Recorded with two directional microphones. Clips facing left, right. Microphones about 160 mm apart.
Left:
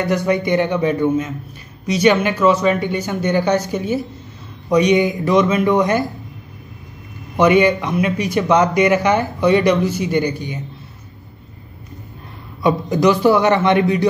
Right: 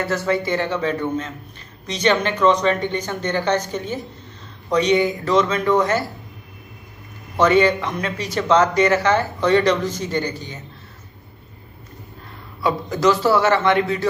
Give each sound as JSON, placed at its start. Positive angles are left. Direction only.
{"t": 0.0, "sound": "speech", "side_deg": 15}
{"t": 7.3, "sound": "speech", "side_deg": 15}
{"t": 12.6, "sound": "speech", "side_deg": 15}